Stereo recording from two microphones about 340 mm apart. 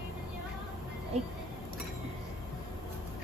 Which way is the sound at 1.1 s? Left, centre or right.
Centre.